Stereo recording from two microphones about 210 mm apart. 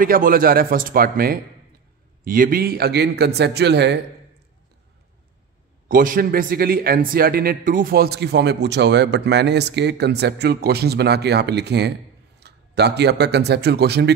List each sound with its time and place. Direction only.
0.0 s speech: 45° right (ahead or behind)
5.9 s speech: 40° right (ahead or behind)